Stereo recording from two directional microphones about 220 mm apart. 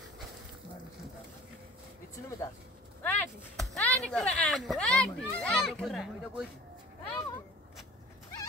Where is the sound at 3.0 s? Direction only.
5° left (ahead or behind).